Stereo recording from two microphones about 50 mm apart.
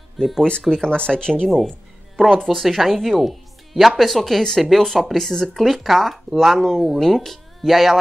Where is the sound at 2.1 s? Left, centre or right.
Centre.